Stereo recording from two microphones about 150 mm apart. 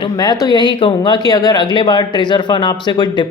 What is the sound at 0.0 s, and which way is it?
A woman's voice, 25° left (ahead or behind).